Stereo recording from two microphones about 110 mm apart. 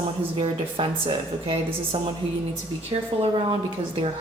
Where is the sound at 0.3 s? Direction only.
55° right (ahead or behind).